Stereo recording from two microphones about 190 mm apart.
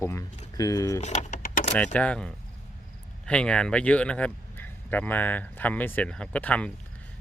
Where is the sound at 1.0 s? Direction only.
40° left (ahead or behind).